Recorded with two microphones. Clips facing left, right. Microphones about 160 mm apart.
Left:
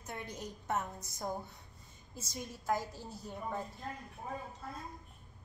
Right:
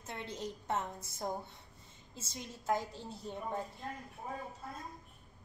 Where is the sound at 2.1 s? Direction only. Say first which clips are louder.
Left 2 dB; 25° right (ahead or behind).